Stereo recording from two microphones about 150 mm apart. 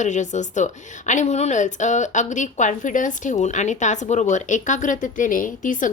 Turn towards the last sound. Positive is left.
turn(degrees=60)  # may be behind; listen again after turning